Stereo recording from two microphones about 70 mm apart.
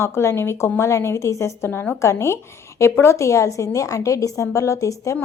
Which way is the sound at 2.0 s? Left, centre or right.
Left.